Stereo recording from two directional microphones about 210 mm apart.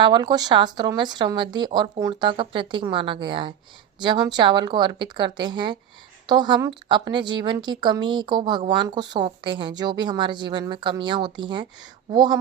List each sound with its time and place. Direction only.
0.0 s a woman's voice: 20° right (ahead or behind)